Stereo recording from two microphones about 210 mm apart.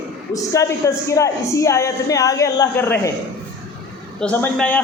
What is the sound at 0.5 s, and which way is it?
A woman's voice, 15° left (ahead or behind).